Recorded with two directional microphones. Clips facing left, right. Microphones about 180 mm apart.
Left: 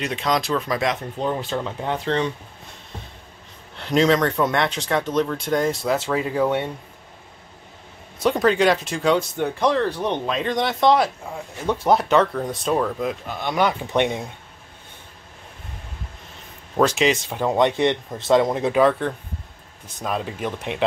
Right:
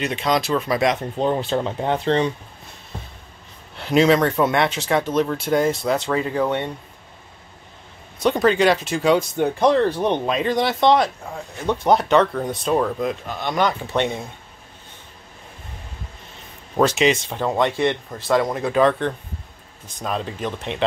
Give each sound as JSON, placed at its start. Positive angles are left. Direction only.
{"t": 0.0, "sound": "speech", "side_deg": 0}
{"t": 1.1, "sound": "speech", "side_deg": -25}
{"t": 3.7, "sound": "speech", "side_deg": -5}
{"t": 8.2, "sound": "speech", "side_deg": 0}
{"t": 9.4, "sound": "speech", "side_deg": -20}
{"t": 10.4, "sound": "speech", "side_deg": -5}
{"t": 13.3, "sound": "speech", "side_deg": 10}
{"t": 16.7, "sound": "speech", "side_deg": 0}
{"t": 17.4, "sound": "speech", "side_deg": 15}
{"t": 18.8, "sound": "speech", "side_deg": 5}